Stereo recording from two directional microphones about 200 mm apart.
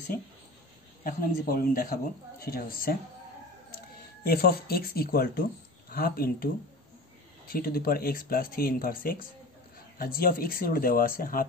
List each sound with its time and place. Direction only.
1.0 s speech: 45° left (ahead or behind)
4.3 s speech: 50° left (ahead or behind)